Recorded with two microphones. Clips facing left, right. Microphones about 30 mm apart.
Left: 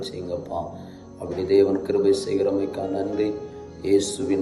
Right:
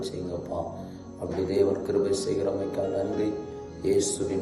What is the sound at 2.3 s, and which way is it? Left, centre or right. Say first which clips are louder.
Speech: left 4 dB; left.